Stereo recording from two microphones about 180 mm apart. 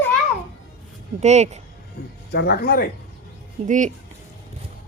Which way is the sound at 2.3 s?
65° left (ahead or behind).